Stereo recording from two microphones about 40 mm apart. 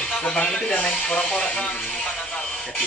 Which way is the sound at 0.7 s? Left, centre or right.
Left.